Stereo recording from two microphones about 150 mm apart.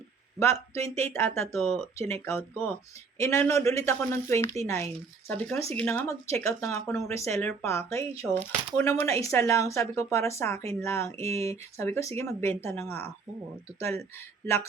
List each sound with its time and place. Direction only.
0.7 s speech: 20° left (ahead or behind)
6.4 s speech: 20° left (ahead or behind)